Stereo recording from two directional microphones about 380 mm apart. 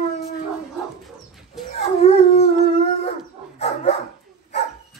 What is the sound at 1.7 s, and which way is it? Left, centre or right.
Howl, centre.